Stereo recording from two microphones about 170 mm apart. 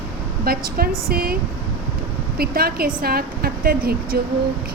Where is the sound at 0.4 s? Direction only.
60° right (ahead or behind).